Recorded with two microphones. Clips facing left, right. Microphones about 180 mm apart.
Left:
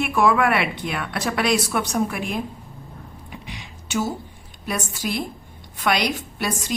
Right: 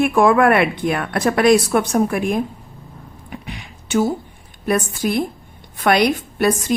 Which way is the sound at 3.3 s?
55° right (ahead or behind).